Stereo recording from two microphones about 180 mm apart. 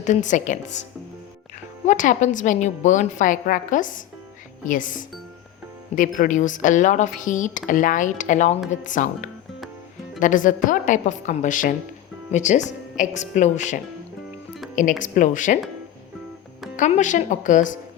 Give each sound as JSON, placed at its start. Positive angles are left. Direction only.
{"t": 0.0, "sound": "a woman's voice", "side_deg": 45}
{"t": 1.9, "sound": "a woman's voice", "side_deg": 45}
{"t": 16.7, "sound": "a woman's voice", "side_deg": 45}